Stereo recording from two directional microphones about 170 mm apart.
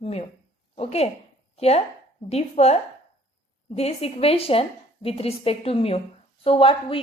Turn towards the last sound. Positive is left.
turn(degrees=30)  # may be behind; listen again after turning